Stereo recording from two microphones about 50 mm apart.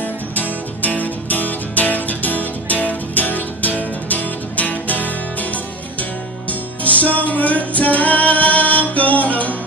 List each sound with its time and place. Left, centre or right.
0.0 s music: left